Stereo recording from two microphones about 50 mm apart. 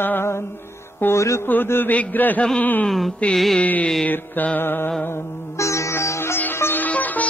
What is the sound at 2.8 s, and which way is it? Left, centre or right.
Music, centre.